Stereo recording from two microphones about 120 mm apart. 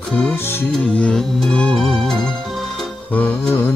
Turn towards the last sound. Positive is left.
turn(degrees=15)  # may be behind; listen again after turning